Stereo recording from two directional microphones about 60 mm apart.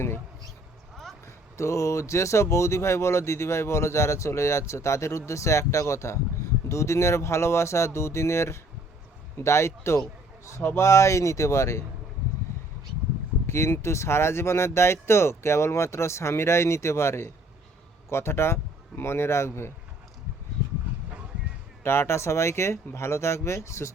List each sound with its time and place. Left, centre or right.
1.5 s speech: left
13.5 s speech: left
21.8 s speech: left